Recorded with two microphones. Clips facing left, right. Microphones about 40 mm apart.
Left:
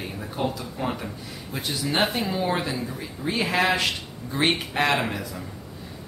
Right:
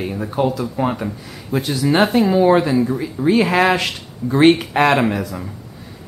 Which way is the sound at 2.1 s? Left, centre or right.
Right.